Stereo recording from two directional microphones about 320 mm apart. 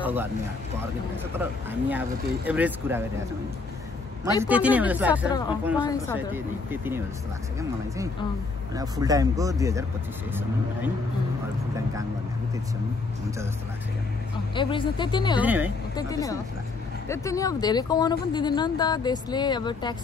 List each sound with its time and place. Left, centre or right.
0.0 s speech: centre
1.4 s speech: centre
4.4 s speech: centre
5.9 s speech: centre
6.1 s speech: centre
8.7 s speech: centre
14.5 s speech: centre
15.4 s speech: centre
16.0 s speech: centre